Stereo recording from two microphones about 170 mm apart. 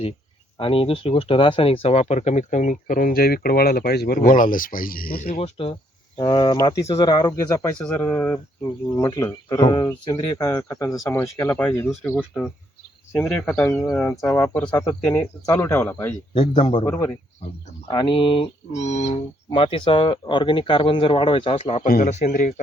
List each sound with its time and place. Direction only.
0.6 s speech: 35° left (ahead or behind); by 5.4 s 60° left (ahead or behind)
5.4 s speech: 35° left (ahead or behind)
6.1 s speech: 25° left (ahead or behind)
16.3 s speech: 30° left (ahead or behind)
16.8 s speech: 15° left (ahead or behind)
17.8 s speech: 30° left (ahead or behind)
21.8 s speech: 55° left (ahead or behind)